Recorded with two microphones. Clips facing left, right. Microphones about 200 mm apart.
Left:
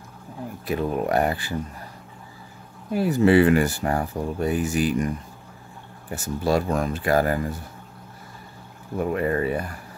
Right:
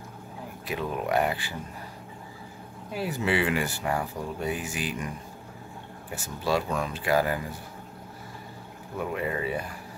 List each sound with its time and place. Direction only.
0.7 s speech: 40° left (ahead or behind)
2.9 s speech: 45° left (ahead or behind)
6.1 s speech: 45° left (ahead or behind)
8.9 s speech: 45° left (ahead or behind)